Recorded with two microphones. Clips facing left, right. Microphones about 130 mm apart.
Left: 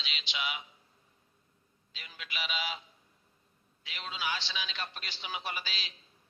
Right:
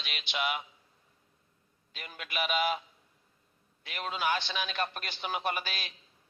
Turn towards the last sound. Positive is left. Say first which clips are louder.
# right 6 dB
turn(degrees=-55)  # may be behind; listen again after turning